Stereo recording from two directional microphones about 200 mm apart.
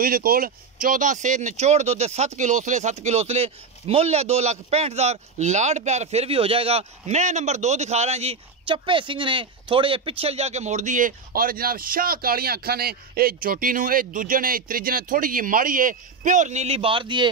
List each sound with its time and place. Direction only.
0.0 s speech: 45° right (ahead or behind); by 17.3 s 25° right (ahead or behind)